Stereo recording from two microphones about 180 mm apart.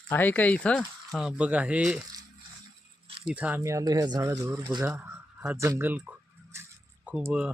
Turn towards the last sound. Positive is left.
turn(degrees=-5)  # may be behind; listen again after turning